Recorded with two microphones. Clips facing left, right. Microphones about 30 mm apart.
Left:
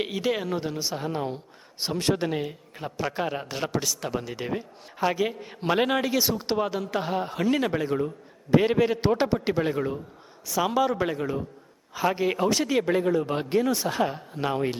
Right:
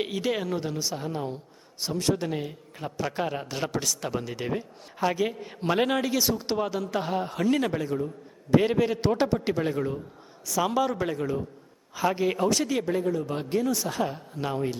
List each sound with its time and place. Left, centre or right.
0.0 s a man's voice: centre
1.8 s speech: left
2.3 s a man's voice: centre
7.9 s speech: left
8.4 s a man's voice: centre
12.8 s speech: left
13.3 s speech: left